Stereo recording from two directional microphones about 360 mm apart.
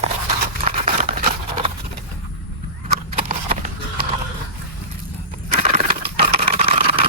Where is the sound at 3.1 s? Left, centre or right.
Right.